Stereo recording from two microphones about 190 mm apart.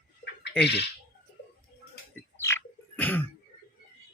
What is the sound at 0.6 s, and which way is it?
Speech, 60° left (ahead or behind).